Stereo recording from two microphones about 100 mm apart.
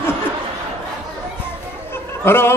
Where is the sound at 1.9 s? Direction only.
25° left (ahead or behind).